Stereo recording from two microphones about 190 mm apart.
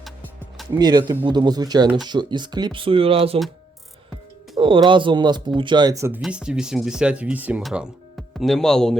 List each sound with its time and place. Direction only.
0.0 s music: centre (ahead or behind)
0.7 s speech: 20° right (ahead or behind)
4.5 s speech: 25° right (ahead or behind); by 9.0 s 5° left (ahead or behind)